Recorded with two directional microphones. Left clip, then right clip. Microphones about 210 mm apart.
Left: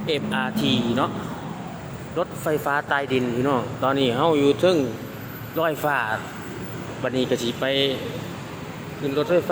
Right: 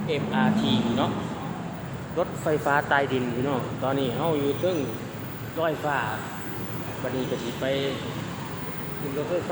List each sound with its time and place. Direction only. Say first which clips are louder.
0.1 s speech: left 1 dB; 30° left (ahead or behind)
2.1 s speech: left 1 dB; 15° left (ahead or behind)
7.2 s speech: left 8 dB; 30° left (ahead or behind)